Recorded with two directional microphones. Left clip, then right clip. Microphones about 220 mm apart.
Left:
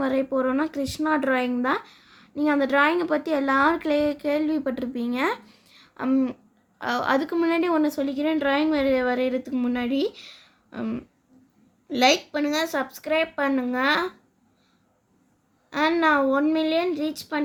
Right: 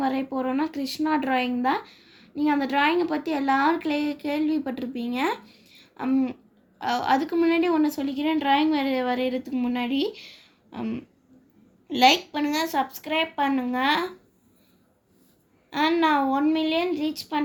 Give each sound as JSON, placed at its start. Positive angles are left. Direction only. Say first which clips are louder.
{"t": 0.0, "sound": "speech", "louder": "left 3 dB", "side_deg": 35}
{"t": 15.7, "sound": "speech", "louder": "left 1 dB", "side_deg": 35}